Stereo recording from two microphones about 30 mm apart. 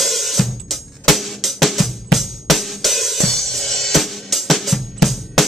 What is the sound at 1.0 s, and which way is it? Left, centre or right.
Drum, centre.